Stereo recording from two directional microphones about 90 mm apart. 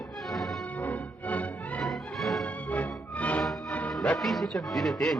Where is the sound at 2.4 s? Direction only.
15° left (ahead or behind).